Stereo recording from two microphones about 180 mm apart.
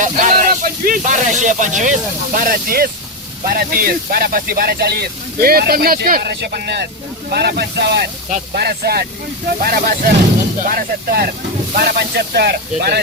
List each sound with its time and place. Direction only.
0.0 s speech: 45° right (ahead or behind); by 13.0 s 65° right (ahead or behind)